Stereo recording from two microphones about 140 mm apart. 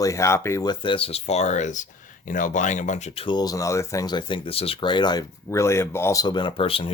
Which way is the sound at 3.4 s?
25° left (ahead or behind).